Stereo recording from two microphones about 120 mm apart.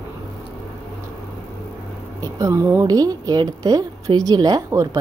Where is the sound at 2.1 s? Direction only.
30° right (ahead or behind).